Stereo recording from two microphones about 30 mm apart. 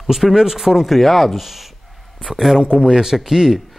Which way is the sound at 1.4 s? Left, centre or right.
Centre.